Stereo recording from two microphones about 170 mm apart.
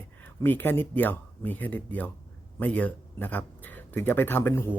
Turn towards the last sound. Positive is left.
turn(degrees=15)  # may be behind; listen again after turning